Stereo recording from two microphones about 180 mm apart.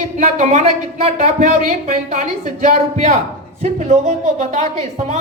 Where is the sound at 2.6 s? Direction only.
45° right (ahead or behind).